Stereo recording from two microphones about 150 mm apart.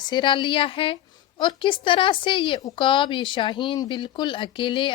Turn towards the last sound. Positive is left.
turn(degrees=35)  # may be behind; listen again after turning